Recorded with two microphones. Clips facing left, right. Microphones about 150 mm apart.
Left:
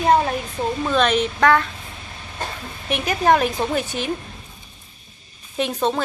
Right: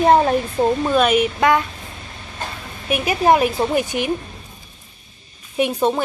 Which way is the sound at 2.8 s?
10° right (ahead or behind).